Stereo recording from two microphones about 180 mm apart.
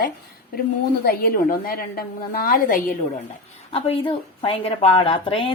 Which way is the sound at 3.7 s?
35° left (ahead or behind).